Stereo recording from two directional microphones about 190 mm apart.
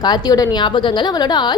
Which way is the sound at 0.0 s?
20° left (ahead or behind).